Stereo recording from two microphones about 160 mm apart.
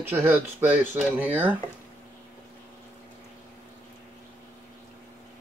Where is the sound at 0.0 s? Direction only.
15° right (ahead or behind).